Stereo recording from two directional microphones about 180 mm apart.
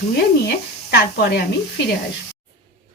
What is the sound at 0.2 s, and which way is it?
Speech, 65° left (ahead or behind).